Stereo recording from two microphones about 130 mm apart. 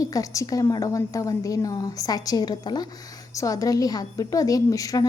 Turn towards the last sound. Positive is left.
turn(degrees=25)  # may be behind; listen again after turning